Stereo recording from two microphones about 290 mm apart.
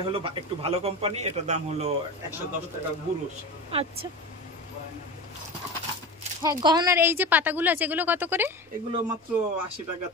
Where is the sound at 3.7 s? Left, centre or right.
Centre.